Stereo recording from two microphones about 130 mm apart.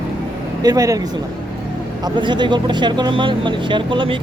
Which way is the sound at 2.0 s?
35° right (ahead or behind).